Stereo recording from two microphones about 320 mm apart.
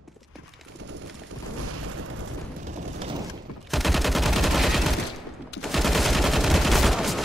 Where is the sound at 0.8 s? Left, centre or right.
Right.